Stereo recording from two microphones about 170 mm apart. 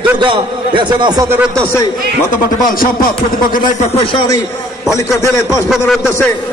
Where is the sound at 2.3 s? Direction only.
50° left (ahead or behind).